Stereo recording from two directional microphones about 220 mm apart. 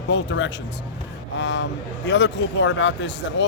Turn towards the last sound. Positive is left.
turn(degrees=55)  # may be behind; listen again after turning